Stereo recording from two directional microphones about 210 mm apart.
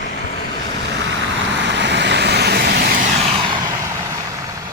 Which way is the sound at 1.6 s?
55° right (ahead or behind).